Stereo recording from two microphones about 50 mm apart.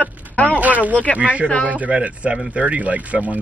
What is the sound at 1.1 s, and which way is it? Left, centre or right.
Speech, right.